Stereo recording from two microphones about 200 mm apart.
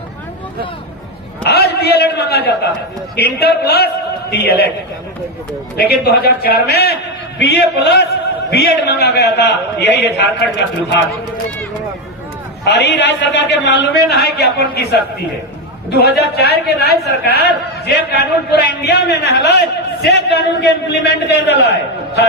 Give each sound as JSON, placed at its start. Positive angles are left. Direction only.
{"t": 1.5, "sound": "a man's voice", "side_deg": 55}
{"t": 5.9, "sound": "a man's voice", "side_deg": 50}
{"t": 12.6, "sound": "a man's voice", "side_deg": 60}